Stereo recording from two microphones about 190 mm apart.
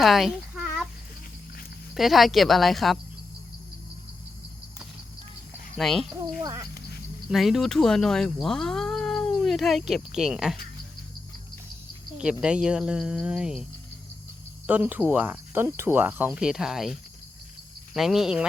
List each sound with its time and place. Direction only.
0.0 s a sound: centre (ahead or behind)
2.0 s speech: centre (ahead or behind)
5.7 s speech: centre (ahead or behind)
6.4 s speech: 20° right (ahead or behind)
7.3 s speech: centre (ahead or behind)
12.2 s speech: 5° right (ahead or behind)
14.7 s speech: 10° right (ahead or behind)